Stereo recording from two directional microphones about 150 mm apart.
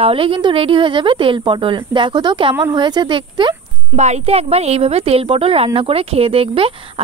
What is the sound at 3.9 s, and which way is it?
A woman's voice, 45° right (ahead or behind).